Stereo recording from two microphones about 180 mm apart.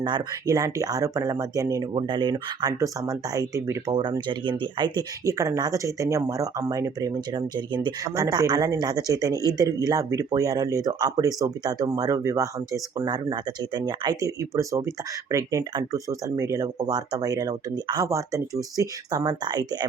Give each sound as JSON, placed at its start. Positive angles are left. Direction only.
{"t": 0.0, "sound": "speech", "side_deg": -20}